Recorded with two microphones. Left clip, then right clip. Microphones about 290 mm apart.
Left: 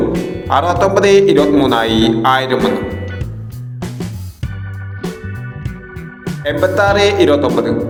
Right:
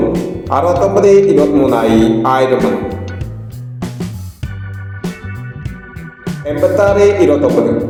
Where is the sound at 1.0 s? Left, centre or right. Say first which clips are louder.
Right 2 dB; left.